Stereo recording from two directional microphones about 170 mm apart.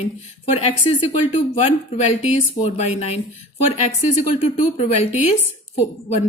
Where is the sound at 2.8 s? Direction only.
40° left (ahead or behind).